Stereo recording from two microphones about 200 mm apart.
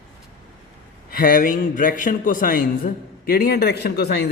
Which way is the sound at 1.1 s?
45° left (ahead or behind).